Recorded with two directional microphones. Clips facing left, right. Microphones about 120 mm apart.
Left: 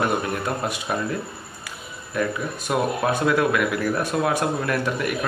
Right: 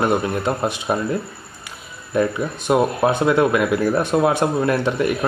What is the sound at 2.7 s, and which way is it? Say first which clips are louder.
Speech: right 5 dB; 25° right (ahead or behind).